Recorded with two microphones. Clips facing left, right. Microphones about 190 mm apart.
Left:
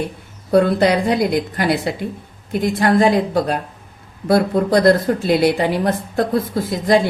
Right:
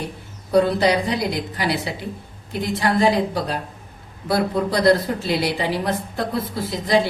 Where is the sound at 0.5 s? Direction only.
55° left (ahead or behind).